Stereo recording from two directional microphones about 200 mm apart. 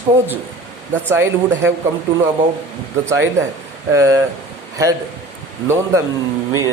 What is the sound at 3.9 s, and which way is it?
A man's voice, 15° right (ahead or behind).